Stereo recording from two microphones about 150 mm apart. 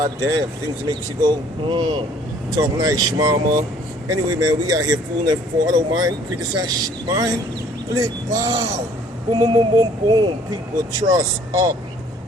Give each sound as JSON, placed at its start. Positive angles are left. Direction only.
{"t": 0.0, "sound": "speech", "side_deg": -20}
{"t": 1.6, "sound": "speech", "side_deg": -30}